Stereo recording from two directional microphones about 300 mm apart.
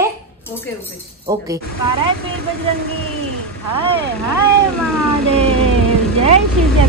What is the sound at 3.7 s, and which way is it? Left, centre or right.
Speech, centre.